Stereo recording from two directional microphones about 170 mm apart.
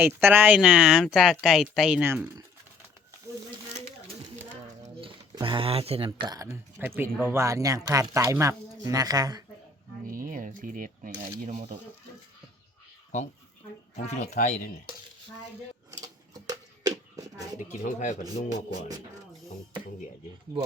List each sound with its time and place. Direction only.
0.0 s speech: 10° right (ahead or behind)
4.9 s pigeon: 30° right (ahead or behind)
6.1 s speech: 20° right (ahead or behind)
10.1 s cutlery: 55° right (ahead or behind)
11.3 s cutlery: 40° right (ahead or behind)
13.1 s speech: 45° left (ahead or behind)
15.9 s a sound: 20° right (ahead or behind)
17.6 s speech: 45° left (ahead or behind)